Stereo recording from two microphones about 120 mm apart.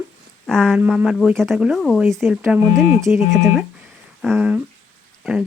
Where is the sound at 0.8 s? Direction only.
10° right (ahead or behind).